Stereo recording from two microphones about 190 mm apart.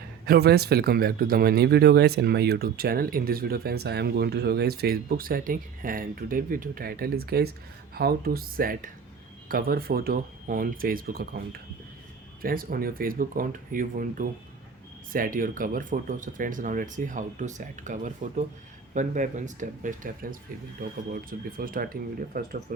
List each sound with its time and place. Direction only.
0.3 s speech: 55° right (ahead or behind)